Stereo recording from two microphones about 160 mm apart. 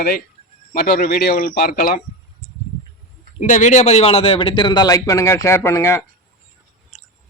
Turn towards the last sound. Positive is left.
turn(degrees=0)  # may be behind; listen again after turning